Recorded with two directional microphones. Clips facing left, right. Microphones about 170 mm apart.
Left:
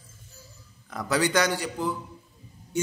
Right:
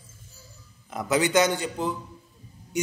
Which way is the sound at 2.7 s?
15° right (ahead or behind).